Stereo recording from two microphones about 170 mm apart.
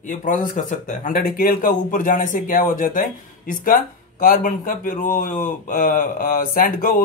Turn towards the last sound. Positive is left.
turn(degrees=55)  # may be behind; listen again after turning